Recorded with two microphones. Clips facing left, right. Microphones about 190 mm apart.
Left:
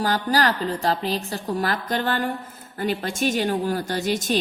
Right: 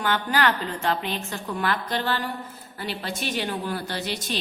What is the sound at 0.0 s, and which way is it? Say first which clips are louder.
A woman's voice: left 2 dB; 35° left (ahead or behind).